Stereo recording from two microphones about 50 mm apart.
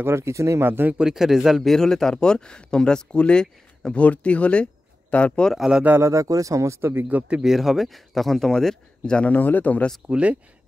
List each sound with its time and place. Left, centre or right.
0.0 s speech: right
0.7 s speech: right
0.9 s speech: centre
1.7 s speech: centre; by 5.5 s left
5.9 s speech: right
7.1 s speech: right
7.4 s speech: centre
9.3 s speech: left
10.0 s speech: right